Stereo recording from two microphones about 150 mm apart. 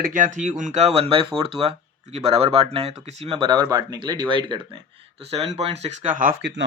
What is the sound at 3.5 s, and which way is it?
Speech, 25° right (ahead or behind).